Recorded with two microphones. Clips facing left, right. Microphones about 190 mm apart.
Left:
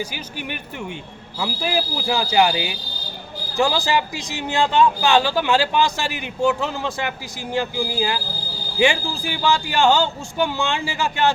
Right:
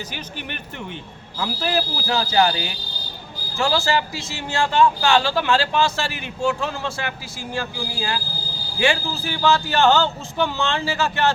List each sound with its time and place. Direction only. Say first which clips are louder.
0.0 s speech: left 3 dB; 10° left (ahead or behind)